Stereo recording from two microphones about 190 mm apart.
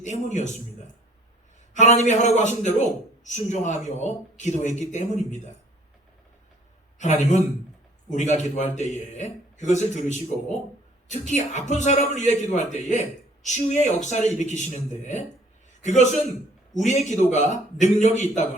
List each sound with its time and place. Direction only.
0.0 s a man's voice: 40° left (ahead or behind)
1.7 s a man's voice: 35° left (ahead or behind)
7.0 s a man's voice: 35° left (ahead or behind)